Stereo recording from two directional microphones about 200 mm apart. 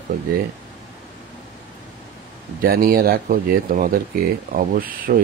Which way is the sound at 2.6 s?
45° right (ahead or behind).